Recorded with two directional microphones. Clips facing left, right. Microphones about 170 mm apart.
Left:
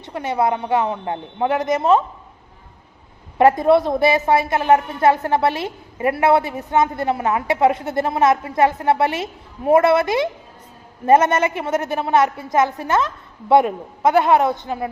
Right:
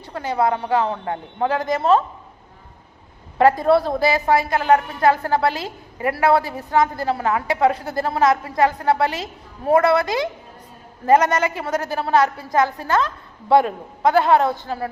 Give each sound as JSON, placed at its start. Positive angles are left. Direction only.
{"t": 0.0, "sound": "a woman's voice", "side_deg": 20}
{"t": 3.3, "sound": "a woman's voice", "side_deg": 20}